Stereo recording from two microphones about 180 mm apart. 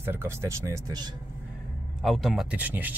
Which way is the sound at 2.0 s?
Centre (ahead or behind).